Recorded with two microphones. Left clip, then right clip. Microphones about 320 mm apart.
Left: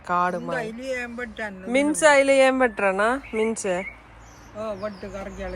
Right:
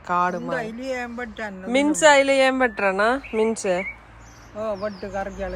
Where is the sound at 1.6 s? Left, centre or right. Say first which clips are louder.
Right 2 dB; centre.